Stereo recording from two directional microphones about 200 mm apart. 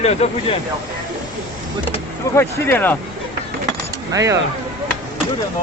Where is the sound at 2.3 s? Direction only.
10° left (ahead or behind).